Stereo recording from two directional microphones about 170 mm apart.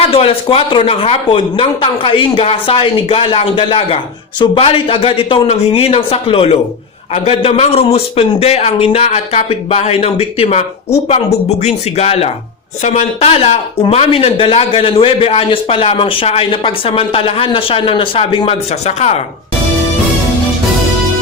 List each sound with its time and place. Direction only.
0.1 s speech: 35° left (ahead or behind)